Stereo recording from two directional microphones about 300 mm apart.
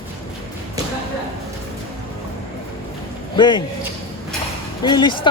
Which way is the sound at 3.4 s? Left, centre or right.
Centre.